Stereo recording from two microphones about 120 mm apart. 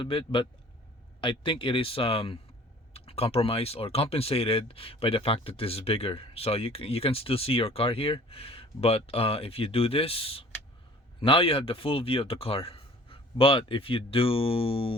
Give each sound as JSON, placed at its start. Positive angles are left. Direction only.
{"t": 0.0, "sound": "speech", "side_deg": 45}